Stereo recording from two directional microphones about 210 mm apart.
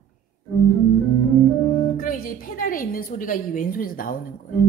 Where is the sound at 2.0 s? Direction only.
40° left (ahead or behind).